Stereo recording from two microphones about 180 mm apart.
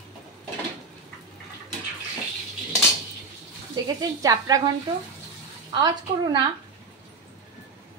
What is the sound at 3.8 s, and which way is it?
Speech, 25° right (ahead or behind).